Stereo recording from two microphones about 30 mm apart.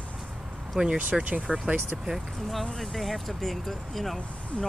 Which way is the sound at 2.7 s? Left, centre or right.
Centre.